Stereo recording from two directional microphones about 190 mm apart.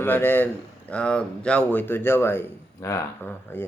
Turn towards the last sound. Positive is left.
turn(degrees=10)  # may be behind; listen again after turning